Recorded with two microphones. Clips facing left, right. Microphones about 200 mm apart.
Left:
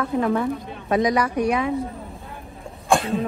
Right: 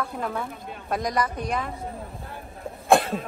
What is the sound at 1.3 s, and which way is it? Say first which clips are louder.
Speech: left 8 dB; 65° left (ahead or behind).